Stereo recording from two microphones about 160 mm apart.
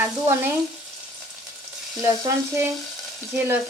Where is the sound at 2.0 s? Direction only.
15° right (ahead or behind).